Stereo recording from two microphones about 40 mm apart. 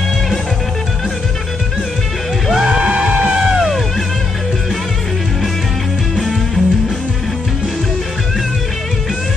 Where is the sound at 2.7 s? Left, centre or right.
Right.